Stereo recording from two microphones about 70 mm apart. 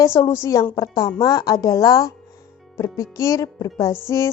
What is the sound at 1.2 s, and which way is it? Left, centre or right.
A woman's voice, left.